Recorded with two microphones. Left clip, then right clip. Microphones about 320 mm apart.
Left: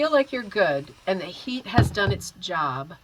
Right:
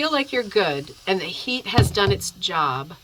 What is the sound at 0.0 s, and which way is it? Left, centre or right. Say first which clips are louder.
Speech: left 1 dB; centre.